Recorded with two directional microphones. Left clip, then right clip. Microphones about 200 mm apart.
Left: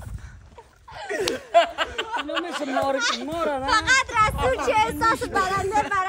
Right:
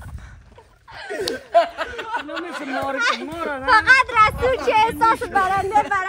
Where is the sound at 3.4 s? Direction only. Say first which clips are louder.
Left 1 dB; 50° left (ahead or behind).